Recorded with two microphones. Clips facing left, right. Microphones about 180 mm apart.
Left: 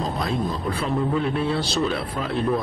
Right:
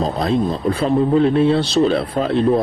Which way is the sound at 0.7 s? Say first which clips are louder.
Right 9 dB; 30° right (ahead or behind).